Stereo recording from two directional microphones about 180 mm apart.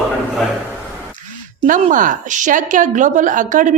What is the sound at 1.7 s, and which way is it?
A woman's voice, 45° right (ahead or behind).